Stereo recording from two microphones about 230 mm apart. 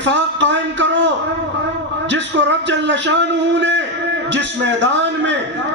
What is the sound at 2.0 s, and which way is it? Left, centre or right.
A man's voice, right.